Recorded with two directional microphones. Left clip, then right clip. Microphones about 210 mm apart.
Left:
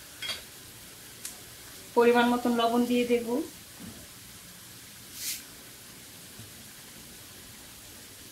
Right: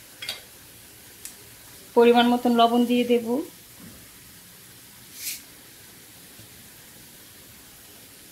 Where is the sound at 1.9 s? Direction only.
35° right (ahead or behind).